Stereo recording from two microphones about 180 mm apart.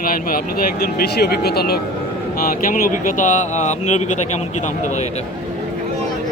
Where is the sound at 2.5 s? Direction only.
50° left (ahead or behind).